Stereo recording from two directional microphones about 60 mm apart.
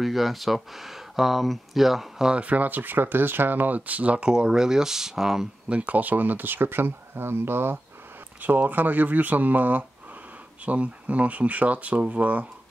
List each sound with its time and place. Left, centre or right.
0.0 s speech: centre
2.3 s speech: right; by 5.5 s centre
5.7 s speech: right